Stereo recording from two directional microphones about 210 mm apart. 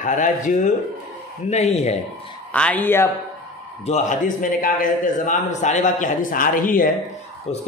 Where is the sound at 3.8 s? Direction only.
35° left (ahead or behind).